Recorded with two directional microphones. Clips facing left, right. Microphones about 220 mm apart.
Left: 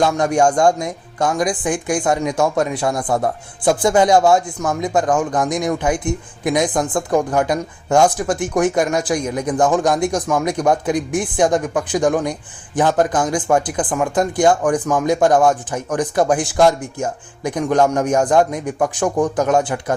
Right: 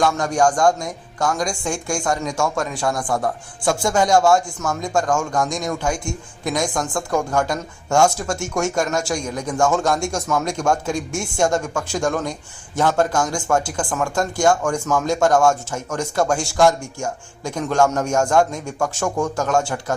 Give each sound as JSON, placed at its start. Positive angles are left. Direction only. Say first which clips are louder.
{"t": 0.0, "sound": "a man's voice", "louder": "left 3 dB", "side_deg": 20}